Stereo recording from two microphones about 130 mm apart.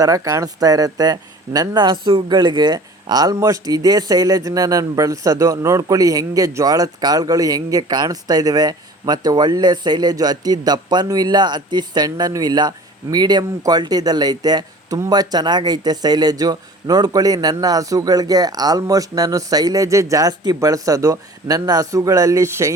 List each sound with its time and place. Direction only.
0.0 s speech: 25° right (ahead or behind)